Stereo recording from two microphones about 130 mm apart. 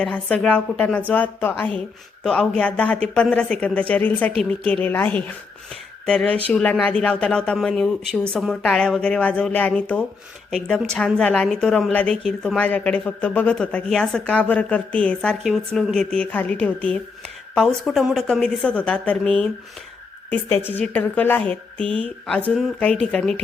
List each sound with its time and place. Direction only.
0.0 s a woman's voice: 10° left (ahead or behind)